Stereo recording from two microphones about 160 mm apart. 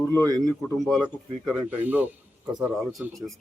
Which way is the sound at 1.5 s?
10° right (ahead or behind).